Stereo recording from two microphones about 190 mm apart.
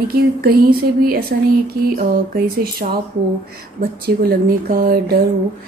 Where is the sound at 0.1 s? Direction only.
50° right (ahead or behind).